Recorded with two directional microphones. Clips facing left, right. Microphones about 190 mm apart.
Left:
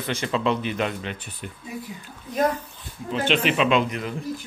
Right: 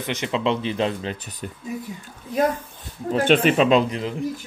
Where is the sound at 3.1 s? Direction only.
50° right (ahead or behind); by 4.1 s 30° right (ahead or behind).